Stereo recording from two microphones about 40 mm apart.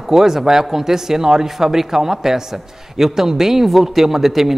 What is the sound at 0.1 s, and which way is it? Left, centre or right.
Speech, centre.